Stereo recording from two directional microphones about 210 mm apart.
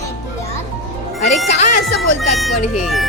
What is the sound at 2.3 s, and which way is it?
Speech, centre (ahead or behind).